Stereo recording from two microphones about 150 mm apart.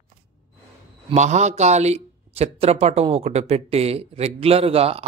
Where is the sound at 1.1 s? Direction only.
50° right (ahead or behind).